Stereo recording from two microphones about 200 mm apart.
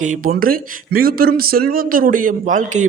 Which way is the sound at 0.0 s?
40° right (ahead or behind).